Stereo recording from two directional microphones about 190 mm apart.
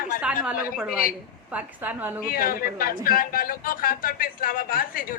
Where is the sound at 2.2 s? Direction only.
50° left (ahead or behind).